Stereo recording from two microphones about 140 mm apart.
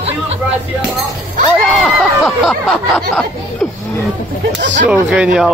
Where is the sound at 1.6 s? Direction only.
5° left (ahead or behind).